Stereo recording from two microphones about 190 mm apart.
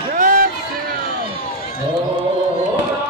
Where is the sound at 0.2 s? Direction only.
50° right (ahead or behind).